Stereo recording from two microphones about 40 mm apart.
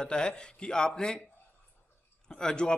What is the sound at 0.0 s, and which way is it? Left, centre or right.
A man's voice, left.